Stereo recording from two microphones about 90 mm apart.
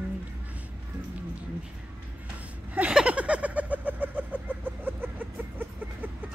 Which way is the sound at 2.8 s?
15° right (ahead or behind).